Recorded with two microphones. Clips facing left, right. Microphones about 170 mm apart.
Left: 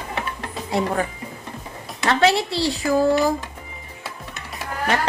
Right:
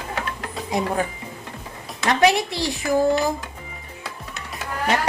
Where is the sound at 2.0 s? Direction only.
15° right (ahead or behind).